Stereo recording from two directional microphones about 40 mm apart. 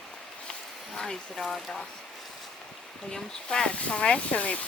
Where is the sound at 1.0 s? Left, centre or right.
Centre.